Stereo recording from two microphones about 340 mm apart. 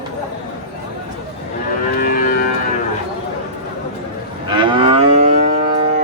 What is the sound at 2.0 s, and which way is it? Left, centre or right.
Livestock, left.